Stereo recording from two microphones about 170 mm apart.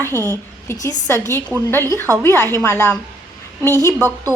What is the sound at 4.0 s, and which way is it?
Speech, 15° right (ahead or behind).